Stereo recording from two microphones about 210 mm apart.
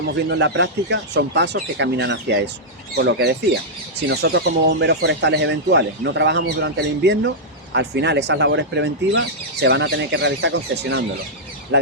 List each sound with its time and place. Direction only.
0.3 s speech: 55° right (ahead or behind)